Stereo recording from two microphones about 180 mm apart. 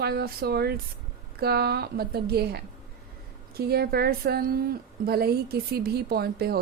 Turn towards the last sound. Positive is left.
turn(degrees=-60)  # may be behind; listen again after turning